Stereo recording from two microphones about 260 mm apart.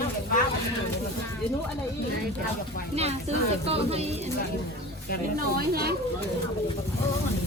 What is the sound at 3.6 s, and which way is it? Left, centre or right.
Speech, right.